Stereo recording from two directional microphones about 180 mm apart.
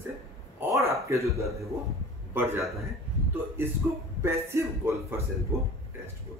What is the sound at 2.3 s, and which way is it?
Speech, 15° right (ahead or behind).